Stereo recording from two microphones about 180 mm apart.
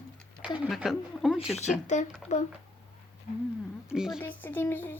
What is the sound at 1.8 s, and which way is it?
Speech, 40° left (ahead or behind).